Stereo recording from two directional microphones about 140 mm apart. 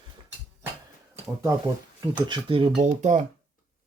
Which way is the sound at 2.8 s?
60° right (ahead or behind).